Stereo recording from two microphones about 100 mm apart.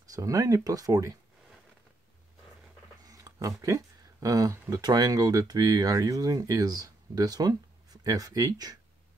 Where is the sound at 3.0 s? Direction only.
35° right (ahead or behind).